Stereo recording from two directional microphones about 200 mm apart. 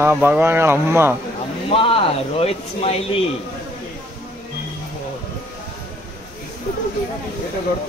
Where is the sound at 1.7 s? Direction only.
25° left (ahead or behind).